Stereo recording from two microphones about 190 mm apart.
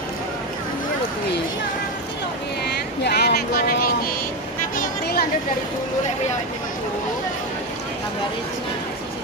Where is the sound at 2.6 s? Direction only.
60° left (ahead or behind).